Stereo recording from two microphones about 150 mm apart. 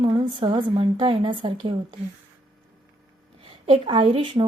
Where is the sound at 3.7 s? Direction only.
35° right (ahead or behind).